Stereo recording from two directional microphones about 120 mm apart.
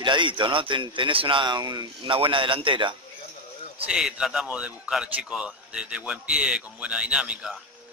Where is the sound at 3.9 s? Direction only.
5° right (ahead or behind).